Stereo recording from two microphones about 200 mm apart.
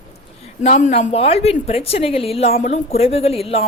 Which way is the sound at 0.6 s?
35° left (ahead or behind).